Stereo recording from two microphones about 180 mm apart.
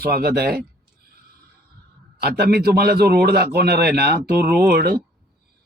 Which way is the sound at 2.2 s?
60° right (ahead or behind).